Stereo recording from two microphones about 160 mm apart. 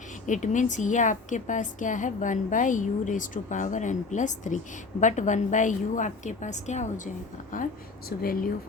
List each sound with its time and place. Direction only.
0.3 s a woman's voice: 50° left (ahead or behind)